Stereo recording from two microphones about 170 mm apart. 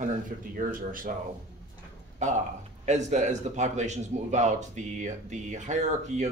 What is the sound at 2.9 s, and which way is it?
A man's voice, 45° right (ahead or behind).